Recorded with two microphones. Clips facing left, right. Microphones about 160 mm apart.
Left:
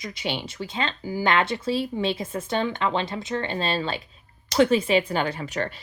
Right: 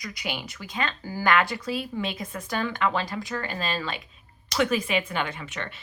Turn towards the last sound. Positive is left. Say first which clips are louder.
# left 5 dB
turn(degrees=35)  # may be behind; listen again after turning